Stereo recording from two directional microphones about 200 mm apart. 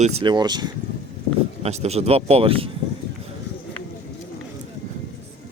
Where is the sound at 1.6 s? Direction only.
30° right (ahead or behind).